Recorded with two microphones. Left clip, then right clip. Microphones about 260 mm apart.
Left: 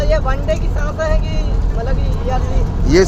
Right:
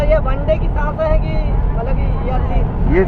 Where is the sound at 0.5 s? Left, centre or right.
Left.